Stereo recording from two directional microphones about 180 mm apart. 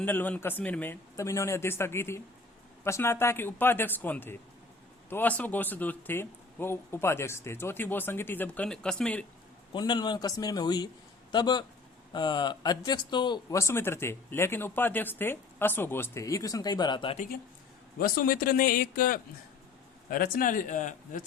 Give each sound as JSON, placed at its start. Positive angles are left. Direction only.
{"t": 0.0, "sound": "speech", "side_deg": 10}
{"t": 9.7, "sound": "a man's voice", "side_deg": 25}
{"t": 18.0, "sound": "speech", "side_deg": 55}